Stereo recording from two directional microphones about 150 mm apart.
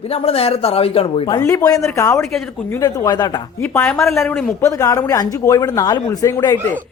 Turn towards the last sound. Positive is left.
turn(degrees=20)  # may be behind; listen again after turning